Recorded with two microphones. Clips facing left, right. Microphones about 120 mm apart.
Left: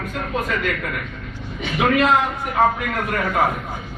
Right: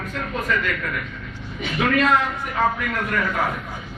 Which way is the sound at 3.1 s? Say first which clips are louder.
Left 4 dB; 50° left (ahead or behind).